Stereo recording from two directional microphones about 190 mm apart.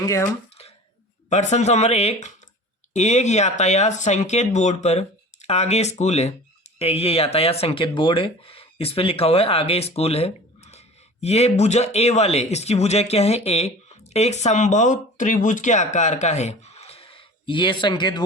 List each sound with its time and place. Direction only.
0.0 s speech: 15° left (ahead or behind)
1.3 s speech: 35° left (ahead or behind)